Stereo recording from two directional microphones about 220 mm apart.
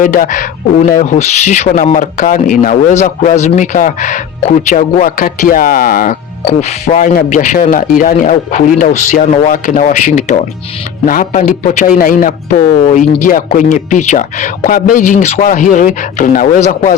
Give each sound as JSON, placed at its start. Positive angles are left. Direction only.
{"t": 0.0, "sound": "speech", "side_deg": 40}